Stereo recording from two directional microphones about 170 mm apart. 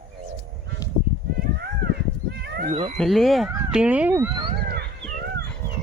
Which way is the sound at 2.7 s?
40° right (ahead or behind).